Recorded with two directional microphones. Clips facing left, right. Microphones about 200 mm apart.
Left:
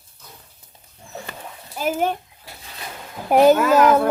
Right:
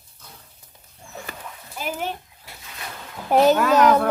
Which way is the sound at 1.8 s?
50° left (ahead or behind).